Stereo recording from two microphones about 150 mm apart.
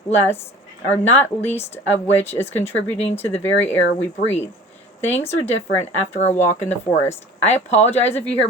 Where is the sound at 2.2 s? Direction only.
15° left (ahead or behind).